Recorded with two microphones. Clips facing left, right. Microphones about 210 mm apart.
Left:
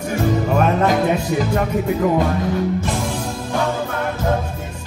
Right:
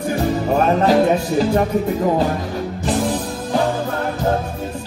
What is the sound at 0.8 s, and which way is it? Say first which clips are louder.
Music: right 3 dB; 35° right (ahead or behind).